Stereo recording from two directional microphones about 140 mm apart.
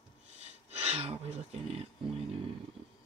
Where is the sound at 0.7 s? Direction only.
50° right (ahead or behind).